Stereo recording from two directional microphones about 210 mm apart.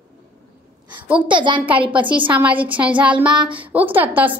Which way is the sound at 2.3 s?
5° right (ahead or behind).